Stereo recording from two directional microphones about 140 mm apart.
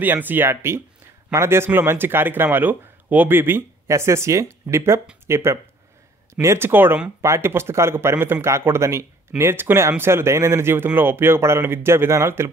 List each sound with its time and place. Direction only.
0.0 s speech: 15° right (ahead or behind)